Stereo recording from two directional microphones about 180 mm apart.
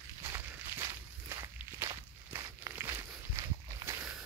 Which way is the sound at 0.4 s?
15° right (ahead or behind).